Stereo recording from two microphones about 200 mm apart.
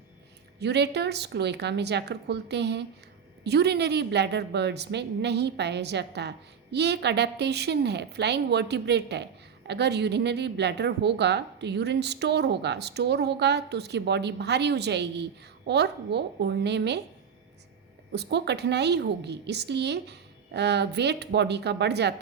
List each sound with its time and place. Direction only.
0.6 s a woman's voice: 55° right (ahead or behind)
18.1 s a woman's voice: 55° right (ahead or behind)